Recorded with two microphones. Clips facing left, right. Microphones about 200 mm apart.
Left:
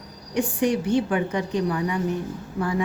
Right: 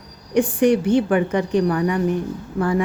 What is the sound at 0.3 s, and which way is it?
A woman's voice, 65° right (ahead or behind).